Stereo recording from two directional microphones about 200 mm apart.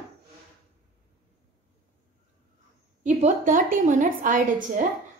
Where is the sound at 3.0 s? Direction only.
40° right (ahead or behind).